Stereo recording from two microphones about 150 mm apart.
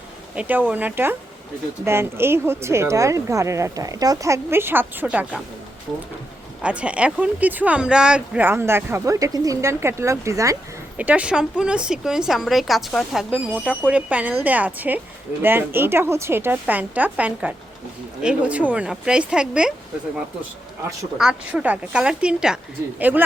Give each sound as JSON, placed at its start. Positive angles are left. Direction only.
{"t": 0.3, "sound": "speech", "side_deg": -10}
{"t": 6.6, "sound": "speech", "side_deg": -10}
{"t": 10.9, "sound": "a woman's voice", "side_deg": -10}
{"t": 21.2, "sound": "speech", "side_deg": -5}